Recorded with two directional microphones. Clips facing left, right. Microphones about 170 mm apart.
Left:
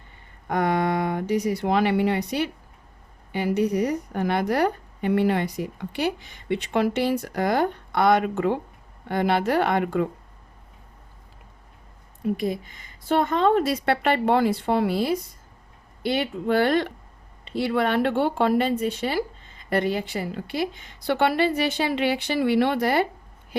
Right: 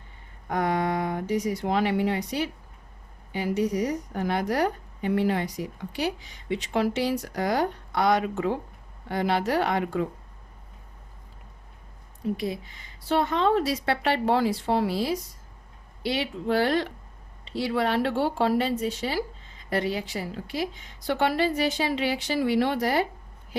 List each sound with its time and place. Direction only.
0.4 s a woman's voice: 75° left (ahead or behind); by 10.1 s 60° left (ahead or behind)
13.1 s a woman's voice: 50° left (ahead or behind)